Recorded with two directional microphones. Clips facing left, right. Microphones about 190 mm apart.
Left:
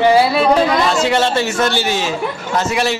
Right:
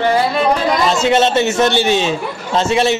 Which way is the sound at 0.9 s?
20° right (ahead or behind).